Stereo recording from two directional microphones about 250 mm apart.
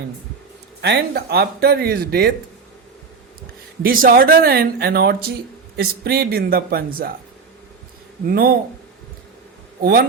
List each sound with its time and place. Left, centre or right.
0.8 s speech: right
3.8 s speech: right
8.3 s speech: right
9.8 s speech: right